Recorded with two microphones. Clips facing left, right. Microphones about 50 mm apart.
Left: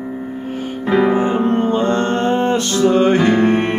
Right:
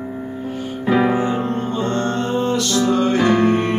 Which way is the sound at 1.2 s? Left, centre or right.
Left.